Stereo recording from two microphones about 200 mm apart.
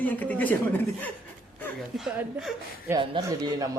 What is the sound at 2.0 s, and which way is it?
Speech, 5° right (ahead or behind).